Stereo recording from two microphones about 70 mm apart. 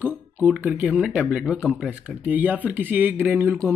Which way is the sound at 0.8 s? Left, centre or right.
Centre.